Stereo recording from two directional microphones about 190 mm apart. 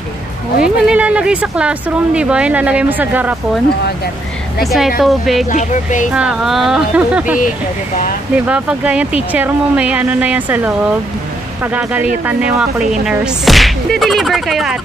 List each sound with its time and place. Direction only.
0.6 s speech: 5° right (ahead or behind)
4.6 s speech: centre (ahead or behind)
5.5 s speech: 40° left (ahead or behind)
6.1 s speech: 5° right (ahead or behind)
8.5 s speech: 5° right (ahead or behind)